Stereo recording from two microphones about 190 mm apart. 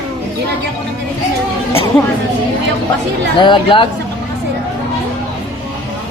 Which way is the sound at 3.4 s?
25° left (ahead or behind).